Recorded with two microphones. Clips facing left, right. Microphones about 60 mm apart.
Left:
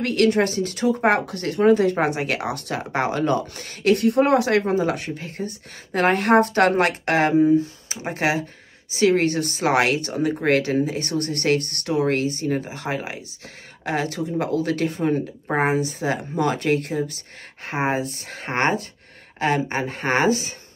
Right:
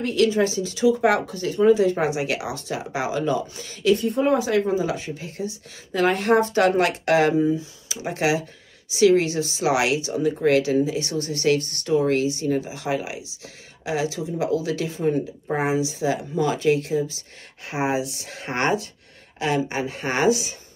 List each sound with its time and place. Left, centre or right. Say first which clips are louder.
0.0 s speech: left 1 dB; left
1.2 s speech: even; left